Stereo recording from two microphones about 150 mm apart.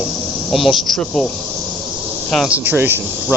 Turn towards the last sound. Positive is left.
turn(degrees=-10)  # may be behind; listen again after turning